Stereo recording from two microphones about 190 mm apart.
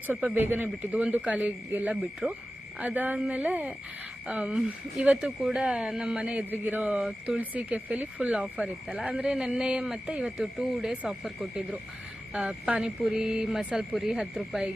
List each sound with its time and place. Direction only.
0.1 s speech: 10° right (ahead or behind)